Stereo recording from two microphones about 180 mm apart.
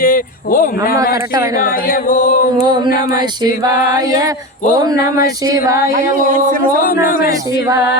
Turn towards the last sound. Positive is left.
turn(degrees=50)  # may be behind; listen again after turning